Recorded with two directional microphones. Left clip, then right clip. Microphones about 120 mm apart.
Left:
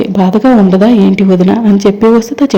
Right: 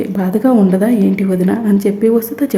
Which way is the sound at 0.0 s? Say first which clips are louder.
Left 6 dB; 20° left (ahead or behind).